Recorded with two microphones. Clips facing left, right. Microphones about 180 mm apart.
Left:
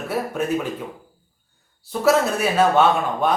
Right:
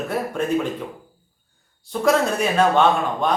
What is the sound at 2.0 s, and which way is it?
A man's voice, 5° left (ahead or behind).